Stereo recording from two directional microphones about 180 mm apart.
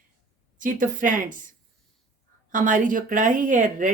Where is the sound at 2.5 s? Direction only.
45° right (ahead or behind).